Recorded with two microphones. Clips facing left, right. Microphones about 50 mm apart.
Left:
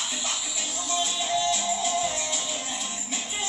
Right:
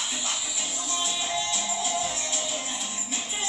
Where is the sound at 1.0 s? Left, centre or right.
Right.